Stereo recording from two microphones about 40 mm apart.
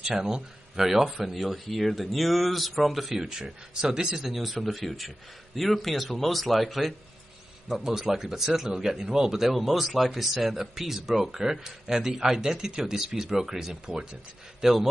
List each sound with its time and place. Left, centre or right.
0.0 s speech: centre
3.3 s speech: centre
4.1 s a man's voice: centre